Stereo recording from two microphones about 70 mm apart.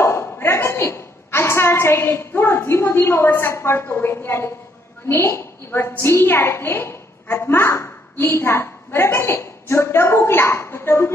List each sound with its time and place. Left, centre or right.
0.0 s a woman's voice: left